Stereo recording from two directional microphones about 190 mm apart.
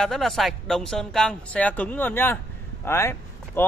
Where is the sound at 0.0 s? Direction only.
Centre (ahead or behind).